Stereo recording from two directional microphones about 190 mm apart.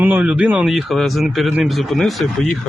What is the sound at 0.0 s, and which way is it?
Speech, 5° right (ahead or behind).